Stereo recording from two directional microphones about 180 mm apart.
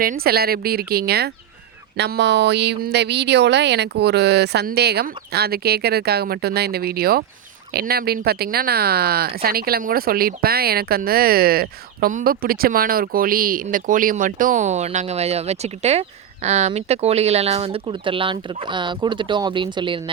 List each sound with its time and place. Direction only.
0.0 s speech: 55° right (ahead or behind); by 20.0 s 25° right (ahead or behind)